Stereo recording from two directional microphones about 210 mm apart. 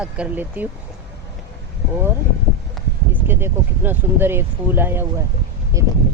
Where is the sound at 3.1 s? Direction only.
10° right (ahead or behind).